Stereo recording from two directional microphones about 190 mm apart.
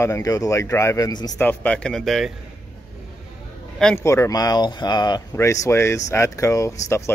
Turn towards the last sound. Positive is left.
turn(degrees=15)  # may be behind; listen again after turning